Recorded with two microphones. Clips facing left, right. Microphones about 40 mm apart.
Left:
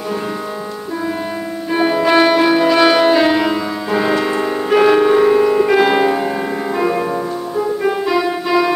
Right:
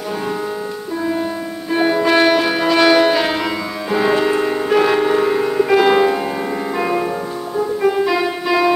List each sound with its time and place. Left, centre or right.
1.7 s music: centre